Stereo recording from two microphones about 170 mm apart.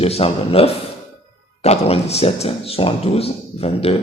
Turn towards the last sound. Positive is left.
turn(degrees=35)  # may be behind; listen again after turning